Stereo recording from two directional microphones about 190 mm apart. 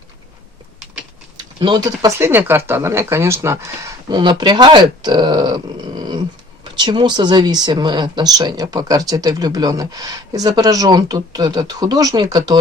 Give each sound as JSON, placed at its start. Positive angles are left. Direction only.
{"t": 1.5, "sound": "speech", "side_deg": -25}